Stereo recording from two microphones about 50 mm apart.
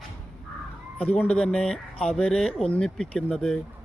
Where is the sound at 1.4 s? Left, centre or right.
Centre.